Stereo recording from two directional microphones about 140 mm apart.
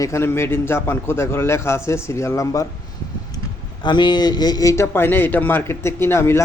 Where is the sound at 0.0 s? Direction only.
20° left (ahead or behind).